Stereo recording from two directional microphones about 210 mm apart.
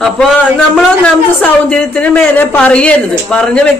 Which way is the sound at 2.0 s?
5° left (ahead or behind).